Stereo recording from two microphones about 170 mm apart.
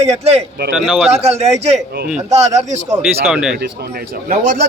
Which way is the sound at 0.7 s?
Centre (ahead or behind).